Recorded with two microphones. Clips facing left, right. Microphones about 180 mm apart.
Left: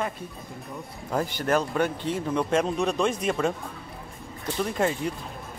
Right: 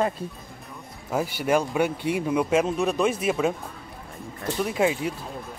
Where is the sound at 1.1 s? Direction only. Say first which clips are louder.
Right 2 dB; 10° right (ahead or behind).